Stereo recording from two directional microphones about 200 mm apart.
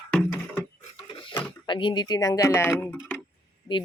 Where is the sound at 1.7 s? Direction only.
25° left (ahead or behind).